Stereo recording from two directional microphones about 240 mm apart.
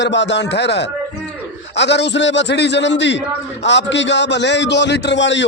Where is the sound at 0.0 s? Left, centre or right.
Left.